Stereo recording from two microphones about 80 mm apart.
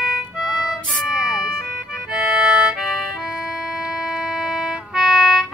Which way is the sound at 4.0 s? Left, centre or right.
Centre.